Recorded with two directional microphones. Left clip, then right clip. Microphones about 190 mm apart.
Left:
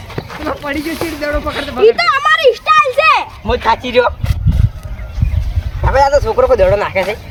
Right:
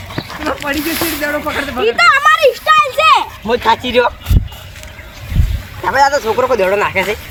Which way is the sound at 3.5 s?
5° right (ahead or behind).